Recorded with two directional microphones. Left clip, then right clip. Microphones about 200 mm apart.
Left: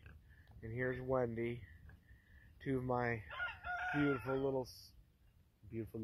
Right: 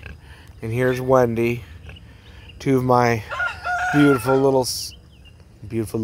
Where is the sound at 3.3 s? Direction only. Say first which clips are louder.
Right 19 dB; 50° right (ahead or behind).